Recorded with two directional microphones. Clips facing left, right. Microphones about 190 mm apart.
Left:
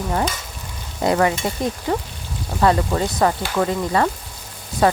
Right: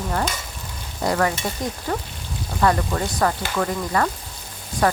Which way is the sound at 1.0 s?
20° left (ahead or behind).